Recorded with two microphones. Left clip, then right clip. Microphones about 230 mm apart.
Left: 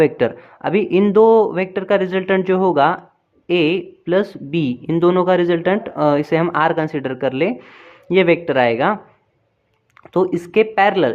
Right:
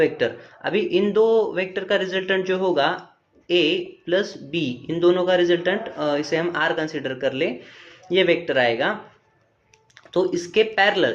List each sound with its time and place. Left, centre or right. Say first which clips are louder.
0.0 s speech: left 5 dB; left
10.1 s speech: left 4 dB; left